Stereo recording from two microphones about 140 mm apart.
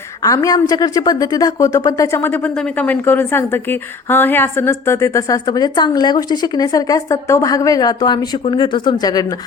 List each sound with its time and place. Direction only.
0.2 s a woman's voice: 25° left (ahead or behind)